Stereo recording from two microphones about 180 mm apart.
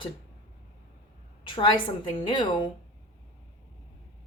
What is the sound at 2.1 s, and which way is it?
Speech, 25° left (ahead or behind).